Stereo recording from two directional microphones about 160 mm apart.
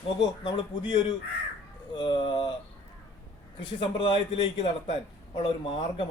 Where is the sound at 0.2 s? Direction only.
30° left (ahead or behind).